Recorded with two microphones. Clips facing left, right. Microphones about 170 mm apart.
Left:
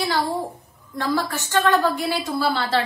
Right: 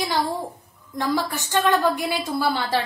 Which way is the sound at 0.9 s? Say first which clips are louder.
Even; 15° right (ahead or behind).